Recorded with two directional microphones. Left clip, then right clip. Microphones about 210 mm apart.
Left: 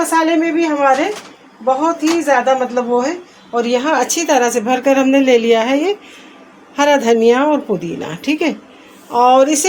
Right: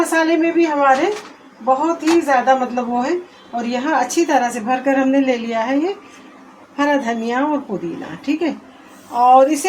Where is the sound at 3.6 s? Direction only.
50° left (ahead or behind).